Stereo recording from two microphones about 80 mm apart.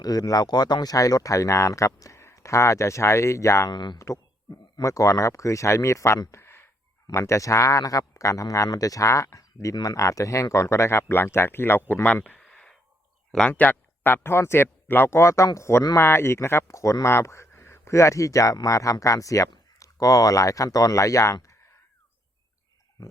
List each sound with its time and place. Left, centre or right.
0.0 s speech: left
3.7 s speech: left
3.9 s speech: left
6.3 s a sound: left
7.1 s a man's voice: left
12.2 s a sound: centre
13.3 s a man's voice: centre; by 21.3 s left